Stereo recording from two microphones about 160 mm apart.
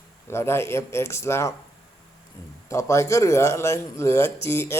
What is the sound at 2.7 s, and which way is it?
A man's voice, 20° left (ahead or behind).